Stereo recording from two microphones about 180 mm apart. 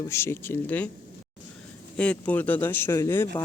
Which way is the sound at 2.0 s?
5° left (ahead or behind).